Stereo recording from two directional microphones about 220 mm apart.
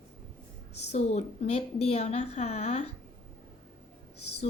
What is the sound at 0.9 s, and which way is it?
Speech, 30° left (ahead or behind).